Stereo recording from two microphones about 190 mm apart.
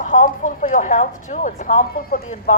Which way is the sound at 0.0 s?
40° left (ahead or behind).